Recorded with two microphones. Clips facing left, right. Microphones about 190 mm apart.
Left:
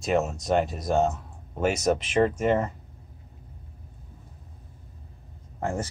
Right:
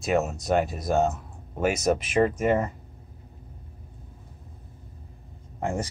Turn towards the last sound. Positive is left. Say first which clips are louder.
# right 1 dB
turn(degrees=-15)  # may be behind; listen again after turning